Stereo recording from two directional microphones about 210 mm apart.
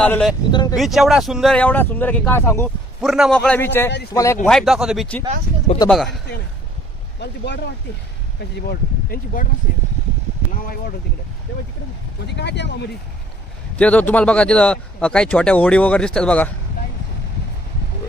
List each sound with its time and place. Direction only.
0.0 s speech: 5° left (ahead or behind)
0.5 s speech: 20° left (ahead or behind)
0.8 s speech: centre (ahead or behind)
3.0 s speech: centre (ahead or behind); by 4.4 s 15° left (ahead or behind)
4.4 s speech: centre (ahead or behind)
7.2 s speech: 55° left (ahead or behind)
8.6 s speech: 40° left (ahead or behind)
12.4 s speech: 55° left (ahead or behind)
13.7 s speech: 5° left (ahead or behind)